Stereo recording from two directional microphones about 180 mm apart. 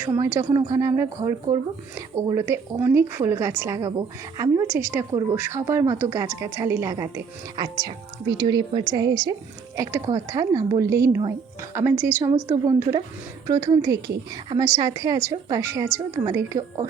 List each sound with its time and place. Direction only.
0.2 s a woman's voice: 15° right (ahead or behind)